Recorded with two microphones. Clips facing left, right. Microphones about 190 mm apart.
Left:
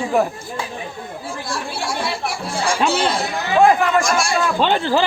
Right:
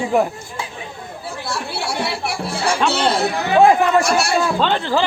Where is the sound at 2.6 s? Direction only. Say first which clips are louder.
Right 1 dB; 65° right (ahead or behind).